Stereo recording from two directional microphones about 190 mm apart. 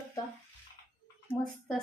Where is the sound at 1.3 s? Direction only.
5° left (ahead or behind).